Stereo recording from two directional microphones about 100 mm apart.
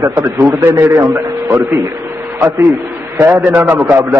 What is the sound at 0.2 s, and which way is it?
Speech, 25° right (ahead or behind).